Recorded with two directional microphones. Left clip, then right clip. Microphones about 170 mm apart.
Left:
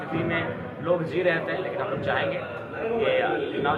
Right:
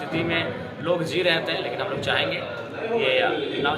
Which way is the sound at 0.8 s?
25° right (ahead or behind).